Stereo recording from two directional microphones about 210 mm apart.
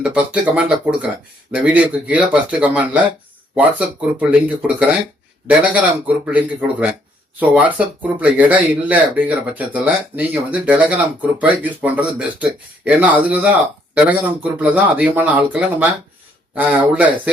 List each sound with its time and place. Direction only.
0.0 s speech: 5° right (ahead or behind)
14.6 s speech: 5° right (ahead or behind)
16.6 s speech: 5° right (ahead or behind)